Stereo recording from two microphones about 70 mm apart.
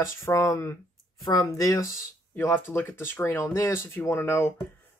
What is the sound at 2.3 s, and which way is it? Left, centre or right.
Speech, left.